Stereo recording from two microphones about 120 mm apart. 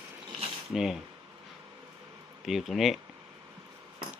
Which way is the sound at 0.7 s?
5° right (ahead or behind).